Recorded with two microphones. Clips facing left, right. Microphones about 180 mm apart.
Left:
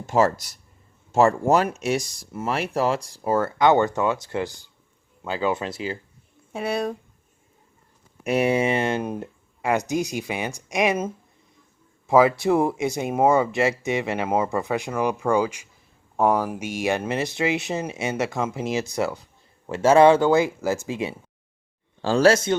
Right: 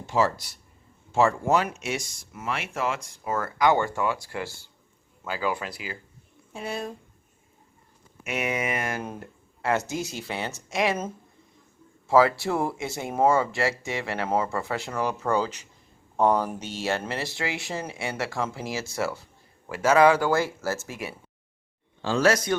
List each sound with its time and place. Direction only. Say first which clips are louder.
0.1 s speech: left 4 dB; 45° left (ahead or behind); by 6.0 s 25° left (ahead or behind)
6.5 s speech: left 7 dB; 70° left (ahead or behind)
8.2 s speech: left 8 dB; 35° left (ahead or behind)
22.0 s speech: left 5 dB; 35° left (ahead or behind)